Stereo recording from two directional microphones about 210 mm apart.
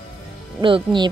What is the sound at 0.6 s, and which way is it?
Speech, 25° right (ahead or behind).